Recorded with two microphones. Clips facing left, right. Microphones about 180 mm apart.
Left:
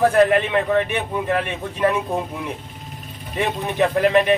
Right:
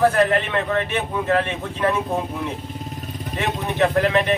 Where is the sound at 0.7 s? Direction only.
15° left (ahead or behind).